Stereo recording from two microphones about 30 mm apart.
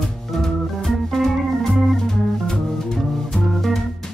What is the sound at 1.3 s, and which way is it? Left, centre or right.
Organ, centre.